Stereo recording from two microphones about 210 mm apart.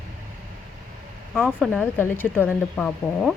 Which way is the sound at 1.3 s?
5° right (ahead or behind).